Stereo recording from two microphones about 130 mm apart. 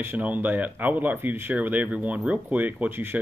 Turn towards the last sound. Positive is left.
turn(degrees=-15)  # may be behind; listen again after turning